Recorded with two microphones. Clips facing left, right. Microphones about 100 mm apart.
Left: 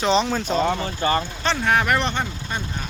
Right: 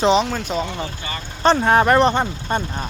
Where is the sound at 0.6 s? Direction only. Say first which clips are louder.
Left 7 dB; 40° left (ahead or behind).